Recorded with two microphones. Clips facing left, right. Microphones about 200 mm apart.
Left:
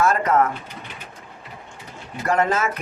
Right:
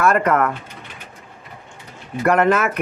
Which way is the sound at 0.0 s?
60° right (ahead or behind).